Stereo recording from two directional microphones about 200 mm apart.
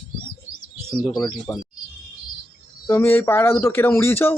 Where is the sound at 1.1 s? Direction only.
20° left (ahead or behind).